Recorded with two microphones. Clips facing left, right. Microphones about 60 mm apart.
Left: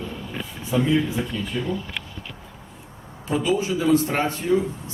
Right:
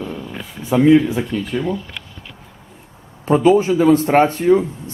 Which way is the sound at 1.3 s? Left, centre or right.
Right.